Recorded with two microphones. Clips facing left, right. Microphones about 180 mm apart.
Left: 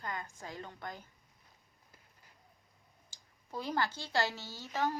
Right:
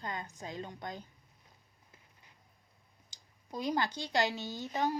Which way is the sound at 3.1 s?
15° right (ahead or behind).